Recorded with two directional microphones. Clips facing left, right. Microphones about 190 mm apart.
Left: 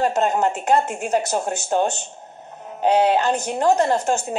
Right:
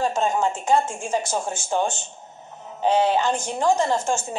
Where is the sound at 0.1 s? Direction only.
65° left (ahead or behind).